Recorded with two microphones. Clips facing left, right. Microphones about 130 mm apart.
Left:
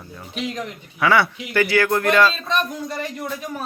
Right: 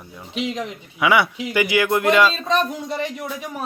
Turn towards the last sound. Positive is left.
turn(degrees=-15)  # may be behind; listen again after turning